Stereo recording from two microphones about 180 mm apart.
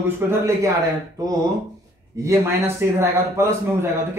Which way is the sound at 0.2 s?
10° right (ahead or behind).